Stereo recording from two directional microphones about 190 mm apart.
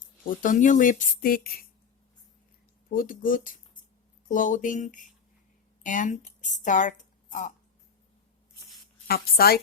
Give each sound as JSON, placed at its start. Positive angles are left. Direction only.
{"t": 0.3, "sound": "speech", "side_deg": 45}
{"t": 2.9, "sound": "speech", "side_deg": 50}
{"t": 9.0, "sound": "speech", "side_deg": 55}